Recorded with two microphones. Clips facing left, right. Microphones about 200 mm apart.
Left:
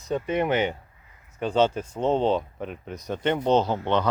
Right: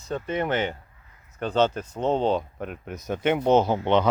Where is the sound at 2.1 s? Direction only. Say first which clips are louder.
Even; centre (ahead or behind).